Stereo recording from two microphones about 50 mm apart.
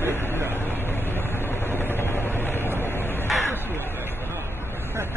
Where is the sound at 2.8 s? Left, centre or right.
Left.